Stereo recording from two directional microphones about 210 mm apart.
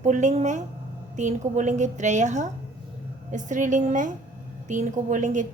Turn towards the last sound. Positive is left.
turn(degrees=-35)  # may be behind; listen again after turning